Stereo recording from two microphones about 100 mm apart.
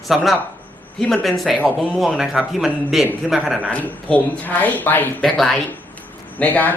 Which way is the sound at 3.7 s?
15° left (ahead or behind).